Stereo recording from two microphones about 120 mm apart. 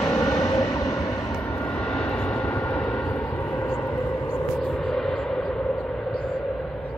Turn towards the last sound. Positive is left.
turn(degrees=10)  # may be behind; listen again after turning